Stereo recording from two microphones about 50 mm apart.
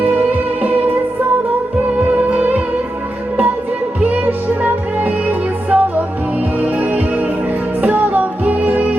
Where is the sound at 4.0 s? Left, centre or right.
Right.